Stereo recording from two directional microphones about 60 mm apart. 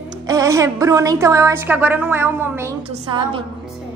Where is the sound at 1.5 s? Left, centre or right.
Right.